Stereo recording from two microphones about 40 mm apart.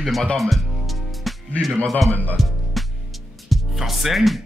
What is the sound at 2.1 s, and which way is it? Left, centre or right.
Speech, left.